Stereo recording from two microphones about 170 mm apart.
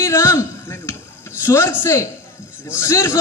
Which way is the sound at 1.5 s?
15° left (ahead or behind).